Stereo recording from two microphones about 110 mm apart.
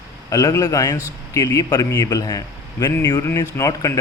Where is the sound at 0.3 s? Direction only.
30° left (ahead or behind).